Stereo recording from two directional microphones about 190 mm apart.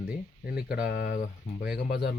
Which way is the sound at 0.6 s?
55° left (ahead or behind).